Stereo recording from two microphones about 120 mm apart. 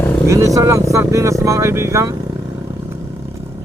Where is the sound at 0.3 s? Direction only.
25° right (ahead or behind).